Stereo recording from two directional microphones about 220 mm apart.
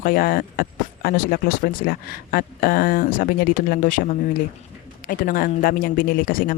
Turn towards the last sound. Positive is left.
turn(degrees=40)  # may be behind; listen again after turning